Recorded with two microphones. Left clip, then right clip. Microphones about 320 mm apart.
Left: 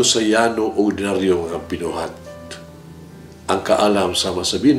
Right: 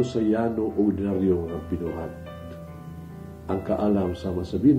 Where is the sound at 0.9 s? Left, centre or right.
Centre.